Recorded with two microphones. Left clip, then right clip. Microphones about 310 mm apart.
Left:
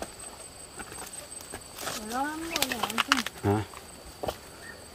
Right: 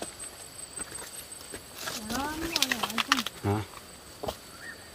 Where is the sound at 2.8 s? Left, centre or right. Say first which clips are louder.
Left 1 dB; centre.